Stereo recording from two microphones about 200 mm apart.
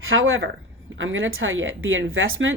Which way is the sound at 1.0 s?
75° right (ahead or behind).